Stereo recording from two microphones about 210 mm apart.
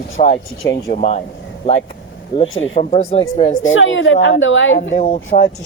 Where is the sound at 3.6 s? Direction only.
65° left (ahead or behind).